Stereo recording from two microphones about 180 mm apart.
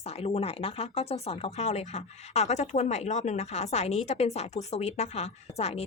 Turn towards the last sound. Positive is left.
turn(degrees=35)  # may be behind; listen again after turning